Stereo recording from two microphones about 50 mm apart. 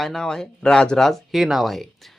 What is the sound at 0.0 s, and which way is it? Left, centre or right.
Speech, centre.